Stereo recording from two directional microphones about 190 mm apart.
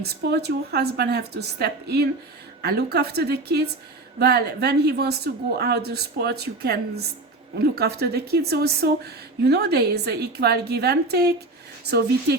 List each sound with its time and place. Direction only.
0.0 s speech: 60° right (ahead or behind)